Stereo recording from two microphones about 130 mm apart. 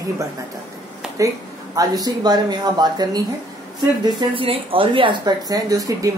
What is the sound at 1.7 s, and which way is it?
Speech, 30° right (ahead or behind).